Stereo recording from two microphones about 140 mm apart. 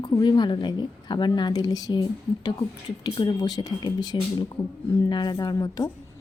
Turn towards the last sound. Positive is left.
turn(degrees=25)  # may be behind; listen again after turning